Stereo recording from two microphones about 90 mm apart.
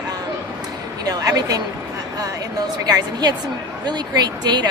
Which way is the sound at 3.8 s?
50° right (ahead or behind).